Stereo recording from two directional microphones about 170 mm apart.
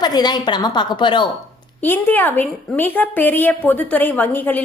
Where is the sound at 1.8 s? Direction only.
10° left (ahead or behind).